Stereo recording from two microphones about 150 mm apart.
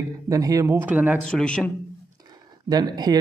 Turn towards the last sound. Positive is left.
turn(degrees=-25)  # may be behind; listen again after turning